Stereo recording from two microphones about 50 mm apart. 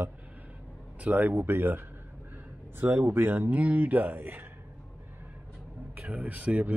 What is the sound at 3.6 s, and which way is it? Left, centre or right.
Speech, right.